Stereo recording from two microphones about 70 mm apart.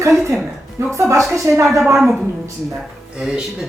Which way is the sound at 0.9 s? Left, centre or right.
Right.